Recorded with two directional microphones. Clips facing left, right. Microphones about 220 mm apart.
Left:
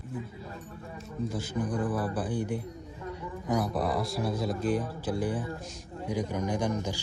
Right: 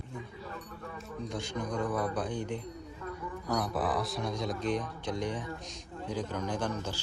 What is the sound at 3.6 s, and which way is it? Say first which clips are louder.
A man's voice: left 1 dB; centre (ahead or behind).